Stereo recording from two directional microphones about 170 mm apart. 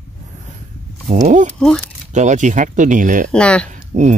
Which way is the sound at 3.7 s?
45° right (ahead or behind).